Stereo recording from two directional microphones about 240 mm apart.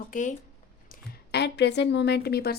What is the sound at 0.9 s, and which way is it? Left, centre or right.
A woman's voice, left.